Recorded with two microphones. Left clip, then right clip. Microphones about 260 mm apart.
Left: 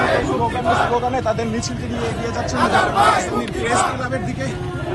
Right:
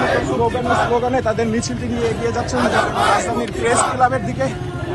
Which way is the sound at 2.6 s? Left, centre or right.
Left.